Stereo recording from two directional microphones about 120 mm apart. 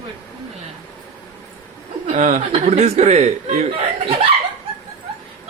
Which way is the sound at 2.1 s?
70° right (ahead or behind).